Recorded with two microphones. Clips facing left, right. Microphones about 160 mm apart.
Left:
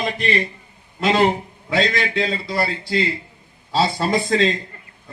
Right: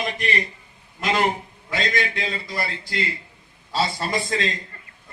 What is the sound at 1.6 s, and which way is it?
A man's voice, 70° left (ahead or behind).